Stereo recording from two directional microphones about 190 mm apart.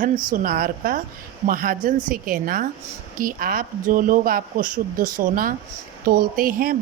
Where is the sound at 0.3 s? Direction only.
45° right (ahead or behind).